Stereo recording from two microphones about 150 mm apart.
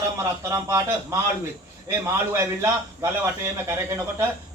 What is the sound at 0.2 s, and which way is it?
A man's voice, 20° right (ahead or behind).